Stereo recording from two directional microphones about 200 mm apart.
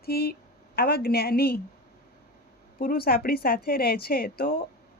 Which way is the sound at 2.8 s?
45° left (ahead or behind).